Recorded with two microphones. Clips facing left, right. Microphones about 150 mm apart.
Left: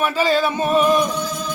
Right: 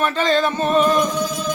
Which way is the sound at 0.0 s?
5° left (ahead or behind).